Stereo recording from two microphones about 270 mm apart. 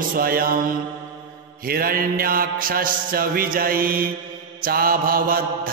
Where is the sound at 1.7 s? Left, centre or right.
Right.